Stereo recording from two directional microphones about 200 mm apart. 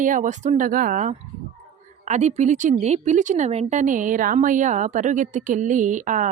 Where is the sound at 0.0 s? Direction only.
40° right (ahead or behind).